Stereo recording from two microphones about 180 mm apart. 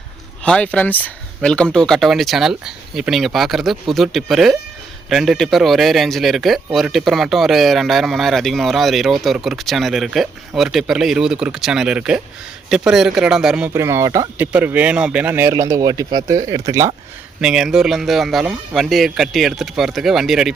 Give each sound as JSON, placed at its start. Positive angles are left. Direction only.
{"t": 0.4, "sound": "speech", "side_deg": 5}
{"t": 13.7, "sound": "speech", "side_deg": -15}
{"t": 17.4, "sound": "speech", "side_deg": -5}